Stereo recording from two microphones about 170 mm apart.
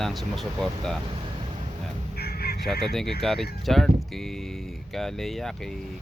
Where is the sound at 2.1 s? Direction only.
65° left (ahead or behind).